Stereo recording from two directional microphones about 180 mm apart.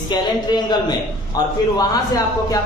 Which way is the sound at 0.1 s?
25° left (ahead or behind).